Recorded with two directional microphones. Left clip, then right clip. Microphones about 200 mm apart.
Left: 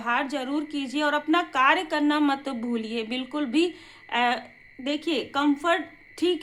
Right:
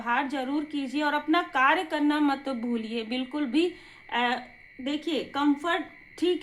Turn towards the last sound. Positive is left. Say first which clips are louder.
# left 1 dB
turn(degrees=20)  # may be behind; listen again after turning